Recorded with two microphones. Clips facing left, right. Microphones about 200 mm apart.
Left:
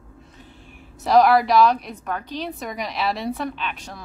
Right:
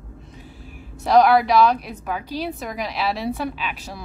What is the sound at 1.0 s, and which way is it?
A woman's voice, centre (ahead or behind).